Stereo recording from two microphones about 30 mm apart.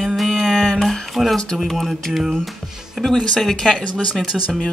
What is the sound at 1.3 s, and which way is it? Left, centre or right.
Speech, left.